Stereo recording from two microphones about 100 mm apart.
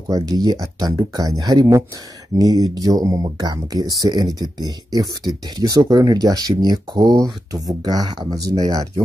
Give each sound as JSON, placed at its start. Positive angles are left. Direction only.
{"t": 0.1, "sound": "speech", "side_deg": -40}